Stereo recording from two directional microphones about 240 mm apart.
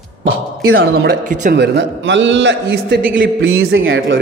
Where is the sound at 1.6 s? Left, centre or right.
Right.